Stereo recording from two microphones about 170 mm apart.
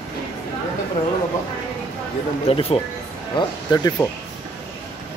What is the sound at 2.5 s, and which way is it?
Speech, 35° left (ahead or behind).